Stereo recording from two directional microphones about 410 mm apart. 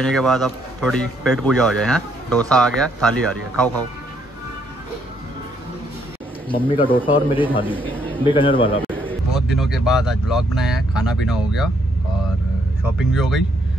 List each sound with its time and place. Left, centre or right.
0.0 s a man's voice: centre
6.6 s a man's voice: centre
12.8 s a man's voice: centre